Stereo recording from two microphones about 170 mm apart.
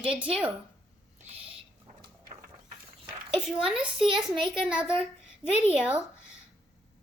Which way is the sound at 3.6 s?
5° right (ahead or behind).